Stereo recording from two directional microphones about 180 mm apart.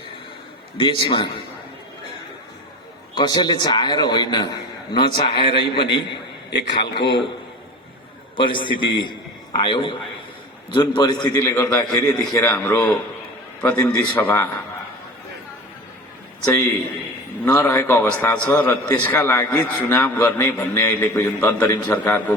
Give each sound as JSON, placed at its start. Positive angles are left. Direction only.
{"t": 0.8, "sound": "a man's voice", "side_deg": 25}
{"t": 3.2, "sound": "a man's voice", "side_deg": 25}
{"t": 6.5, "sound": "a man's voice", "side_deg": 75}
{"t": 8.4, "sound": "a man's voice", "side_deg": 25}
{"t": 17.4, "sound": "a man's voice", "side_deg": 15}